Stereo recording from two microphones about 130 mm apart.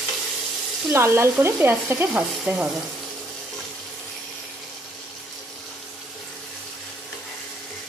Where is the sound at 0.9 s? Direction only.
20° right (ahead or behind).